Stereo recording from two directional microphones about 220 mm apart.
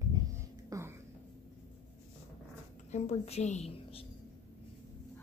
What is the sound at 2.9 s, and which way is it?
A woman's voice, 30° left (ahead or behind).